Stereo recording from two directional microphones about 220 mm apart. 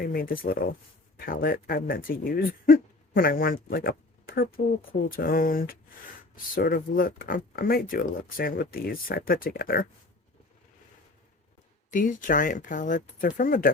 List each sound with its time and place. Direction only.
0.0 s speech: 40° left (ahead or behind)
11.9 s speech: 35° left (ahead or behind)